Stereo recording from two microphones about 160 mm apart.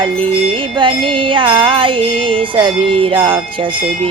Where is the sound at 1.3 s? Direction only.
30° right (ahead or behind).